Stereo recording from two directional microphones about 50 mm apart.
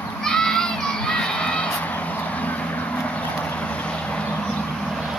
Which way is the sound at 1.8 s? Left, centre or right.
Left.